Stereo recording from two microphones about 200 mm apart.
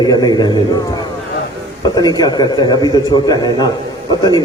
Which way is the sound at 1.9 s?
20° left (ahead or behind).